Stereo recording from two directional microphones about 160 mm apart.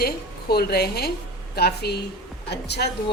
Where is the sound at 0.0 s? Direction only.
75° left (ahead or behind).